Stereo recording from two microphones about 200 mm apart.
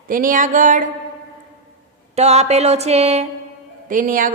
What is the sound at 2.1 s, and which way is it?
A woman's voice, 35° right (ahead or behind).